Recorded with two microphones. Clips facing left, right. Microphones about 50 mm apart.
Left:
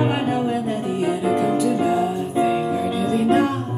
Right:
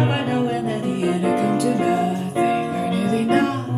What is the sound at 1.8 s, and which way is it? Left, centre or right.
Music, centre.